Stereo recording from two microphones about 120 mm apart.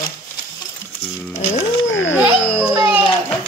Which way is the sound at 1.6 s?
25° left (ahead or behind).